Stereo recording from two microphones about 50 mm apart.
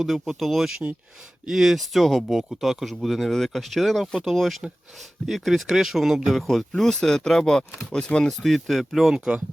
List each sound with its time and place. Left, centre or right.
0.0 s speech: centre
8.3 s speech: centre